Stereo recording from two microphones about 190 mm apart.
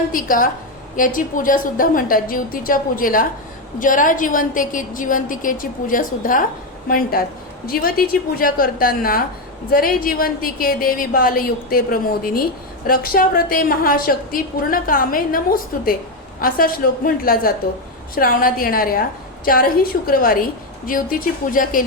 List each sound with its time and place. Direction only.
0.1 s a woman's voice: 45° left (ahead or behind)